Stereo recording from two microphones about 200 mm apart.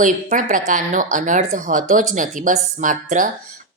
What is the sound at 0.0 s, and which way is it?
A woman's voice, 40° right (ahead or behind).